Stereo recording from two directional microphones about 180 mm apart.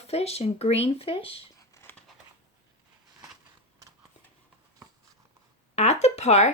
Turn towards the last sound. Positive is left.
turn(degrees=40)  # may be behind; listen again after turning